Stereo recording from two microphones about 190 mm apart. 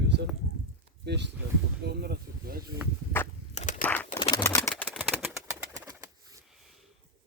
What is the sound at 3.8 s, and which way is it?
Bird, 10° left (ahead or behind).